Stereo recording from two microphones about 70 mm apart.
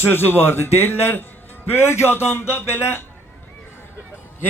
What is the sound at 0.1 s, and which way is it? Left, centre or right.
A man's voice, left.